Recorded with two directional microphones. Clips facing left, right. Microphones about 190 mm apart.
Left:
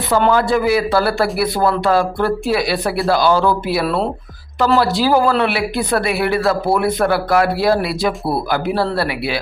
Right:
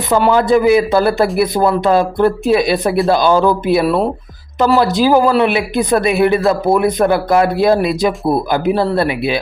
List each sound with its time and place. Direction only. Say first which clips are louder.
0.1 s speech: right 3 dB; 15° right (ahead or behind)